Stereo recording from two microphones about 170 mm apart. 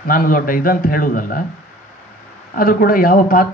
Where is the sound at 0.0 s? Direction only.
55° left (ahead or behind).